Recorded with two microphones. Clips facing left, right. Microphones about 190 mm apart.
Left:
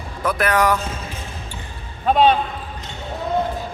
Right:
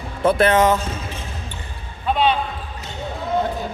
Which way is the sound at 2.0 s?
45° left (ahead or behind).